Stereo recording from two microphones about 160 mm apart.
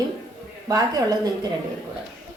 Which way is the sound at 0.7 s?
20° right (ahead or behind).